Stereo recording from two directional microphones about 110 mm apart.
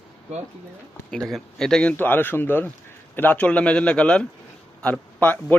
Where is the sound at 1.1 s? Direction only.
5° left (ahead or behind).